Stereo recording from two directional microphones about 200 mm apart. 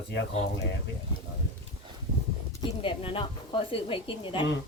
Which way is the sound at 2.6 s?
25° left (ahead or behind).